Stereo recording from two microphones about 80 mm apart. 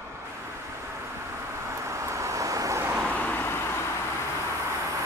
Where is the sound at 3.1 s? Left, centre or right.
Left.